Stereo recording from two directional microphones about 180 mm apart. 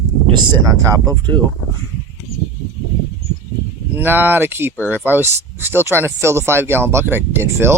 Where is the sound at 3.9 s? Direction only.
10° right (ahead or behind).